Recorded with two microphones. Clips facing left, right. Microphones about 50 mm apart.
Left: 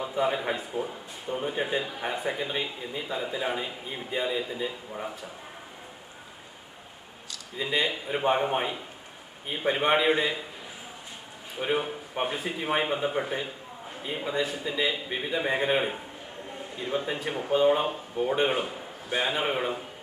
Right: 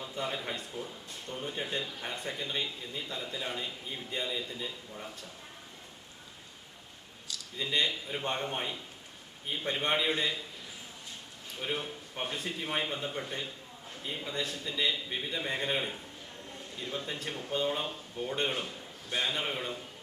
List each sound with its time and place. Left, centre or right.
0.0 s a man's voice: centre
7.5 s a man's voice: centre
7.9 s speech: left
8.2 s speech: centre
11.5 s a man's voice: left